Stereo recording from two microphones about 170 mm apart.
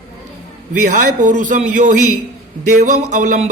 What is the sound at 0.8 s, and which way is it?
A man's voice, 50° right (ahead or behind).